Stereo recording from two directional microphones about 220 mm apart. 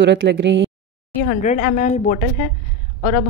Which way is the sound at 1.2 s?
35° left (ahead or behind).